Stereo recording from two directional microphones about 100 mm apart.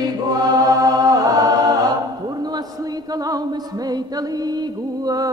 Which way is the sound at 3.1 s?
40° right (ahead or behind).